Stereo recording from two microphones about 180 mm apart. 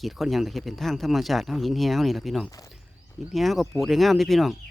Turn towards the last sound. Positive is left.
turn(degrees=0)  # may be behind; listen again after turning